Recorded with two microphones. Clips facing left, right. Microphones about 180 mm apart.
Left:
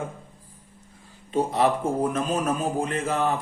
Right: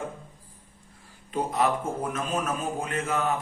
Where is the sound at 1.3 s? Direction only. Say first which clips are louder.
Left 4 dB; 30° left (ahead or behind).